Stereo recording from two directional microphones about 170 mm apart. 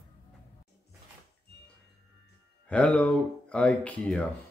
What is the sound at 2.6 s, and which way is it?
Speech, 5° left (ahead or behind).